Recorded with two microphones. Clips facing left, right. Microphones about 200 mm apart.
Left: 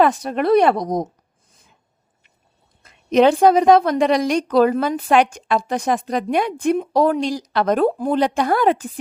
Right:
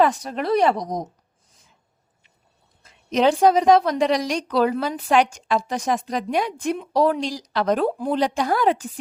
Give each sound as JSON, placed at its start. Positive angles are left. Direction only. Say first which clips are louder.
{"t": 0.0, "sound": "a woman's voice", "louder": "left 3 dB", "side_deg": 60}
{"t": 2.8, "sound": "a woman's voice", "louder": "left 5 dB", "side_deg": 60}